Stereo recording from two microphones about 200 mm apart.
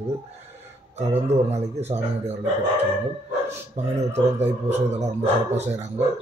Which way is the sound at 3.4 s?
35° right (ahead or behind).